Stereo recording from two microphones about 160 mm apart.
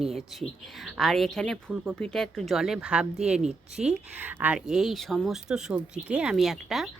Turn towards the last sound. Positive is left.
turn(degrees=0)  # may be behind; listen again after turning